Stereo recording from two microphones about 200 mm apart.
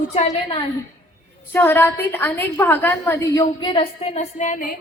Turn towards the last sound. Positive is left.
turn(degrees=40)  # may be behind; listen again after turning